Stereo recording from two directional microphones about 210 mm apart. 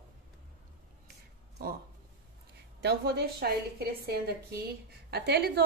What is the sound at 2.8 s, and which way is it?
A woman's voice, 50° right (ahead or behind).